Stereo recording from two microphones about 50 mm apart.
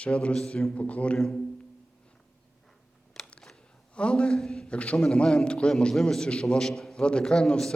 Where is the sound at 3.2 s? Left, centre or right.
Centre.